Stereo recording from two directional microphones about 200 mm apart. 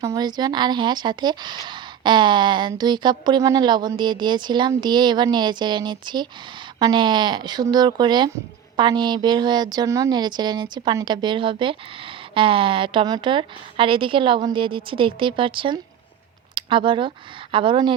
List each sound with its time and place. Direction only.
0.0 s a woman's voice: 20° right (ahead or behind)